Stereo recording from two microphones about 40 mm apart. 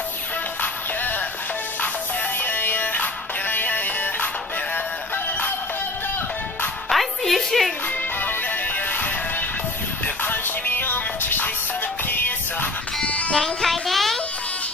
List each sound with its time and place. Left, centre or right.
2.4 s music: left
6.9 s music: centre
8.2 s music: left
10.7 s music: left
13.0 s music: left
13.3 s music: centre